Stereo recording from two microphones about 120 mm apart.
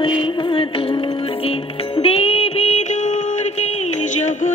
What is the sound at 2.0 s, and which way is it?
Music, 55° left (ahead or behind).